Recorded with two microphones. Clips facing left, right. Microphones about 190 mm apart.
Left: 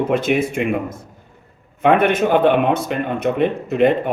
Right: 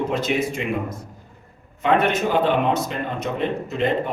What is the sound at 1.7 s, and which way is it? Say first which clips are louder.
A man's voice: left 5 dB; 55° left (ahead or behind).